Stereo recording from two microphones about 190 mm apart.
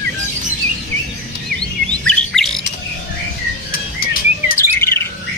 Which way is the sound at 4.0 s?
50° left (ahead or behind).